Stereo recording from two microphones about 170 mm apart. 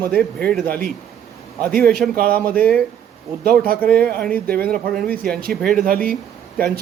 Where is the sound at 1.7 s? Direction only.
65° right (ahead or behind).